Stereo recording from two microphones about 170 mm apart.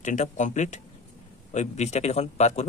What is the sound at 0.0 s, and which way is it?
A man's voice, 45° left (ahead or behind).